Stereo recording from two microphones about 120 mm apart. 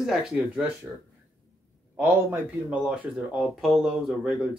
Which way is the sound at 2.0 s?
20° right (ahead or behind).